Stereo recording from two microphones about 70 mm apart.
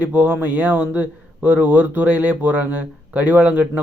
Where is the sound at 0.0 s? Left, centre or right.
Right.